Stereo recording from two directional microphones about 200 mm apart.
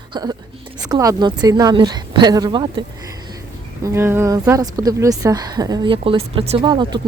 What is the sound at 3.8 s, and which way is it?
A woman's voice, 10° right (ahead or behind).